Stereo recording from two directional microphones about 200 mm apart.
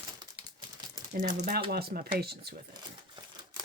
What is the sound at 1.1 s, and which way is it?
Speech, 40° right (ahead or behind).